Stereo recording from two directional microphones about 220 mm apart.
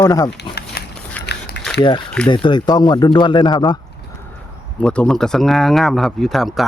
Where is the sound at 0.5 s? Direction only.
20° left (ahead or behind).